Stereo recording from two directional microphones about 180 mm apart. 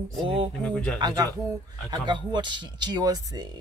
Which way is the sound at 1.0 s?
20° right (ahead or behind).